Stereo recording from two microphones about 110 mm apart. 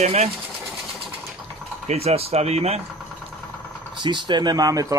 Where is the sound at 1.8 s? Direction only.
85° right.